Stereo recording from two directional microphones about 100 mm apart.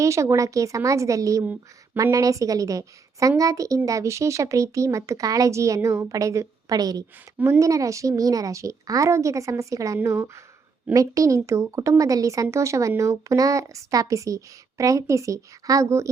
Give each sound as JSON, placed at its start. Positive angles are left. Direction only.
{"t": 0.0, "sound": "speech", "side_deg": -30}